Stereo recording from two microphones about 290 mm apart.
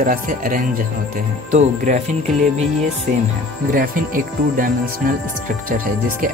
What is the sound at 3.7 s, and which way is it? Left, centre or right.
Speech, right.